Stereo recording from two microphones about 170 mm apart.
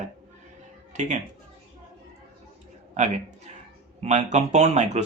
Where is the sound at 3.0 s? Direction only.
45° right (ahead or behind).